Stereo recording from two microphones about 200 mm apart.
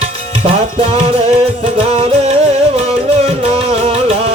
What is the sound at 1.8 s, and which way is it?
Music, 30° right (ahead or behind).